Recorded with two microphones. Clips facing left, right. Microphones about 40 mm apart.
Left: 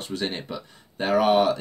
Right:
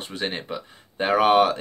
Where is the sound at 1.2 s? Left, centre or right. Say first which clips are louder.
Right 2 dB; right.